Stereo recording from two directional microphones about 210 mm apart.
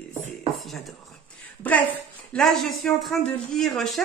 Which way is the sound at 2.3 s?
Centre (ahead or behind).